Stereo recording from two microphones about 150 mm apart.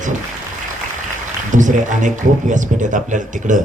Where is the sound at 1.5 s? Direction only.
55° right (ahead or behind).